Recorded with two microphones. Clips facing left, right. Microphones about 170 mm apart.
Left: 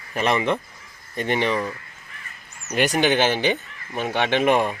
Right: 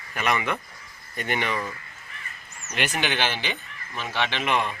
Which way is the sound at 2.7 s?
40° left (ahead or behind).